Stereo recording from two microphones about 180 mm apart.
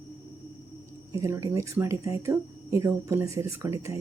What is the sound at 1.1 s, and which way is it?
Speech, 15° right (ahead or behind).